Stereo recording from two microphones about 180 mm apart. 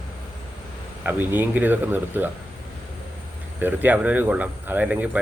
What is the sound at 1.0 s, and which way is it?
Speech, 10° right (ahead or behind).